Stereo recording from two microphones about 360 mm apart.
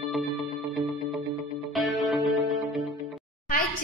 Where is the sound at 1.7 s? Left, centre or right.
Centre.